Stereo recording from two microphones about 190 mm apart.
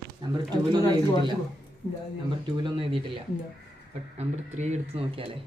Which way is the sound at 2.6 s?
30° right (ahead or behind).